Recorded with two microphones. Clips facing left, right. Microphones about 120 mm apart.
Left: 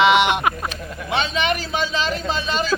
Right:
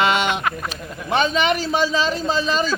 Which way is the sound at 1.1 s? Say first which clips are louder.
Right 4 dB; 45° right (ahead or behind).